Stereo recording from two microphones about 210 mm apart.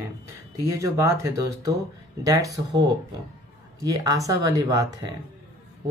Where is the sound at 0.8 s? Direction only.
15° right (ahead or behind).